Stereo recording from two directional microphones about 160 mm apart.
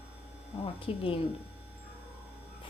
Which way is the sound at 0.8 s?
35° left (ahead or behind).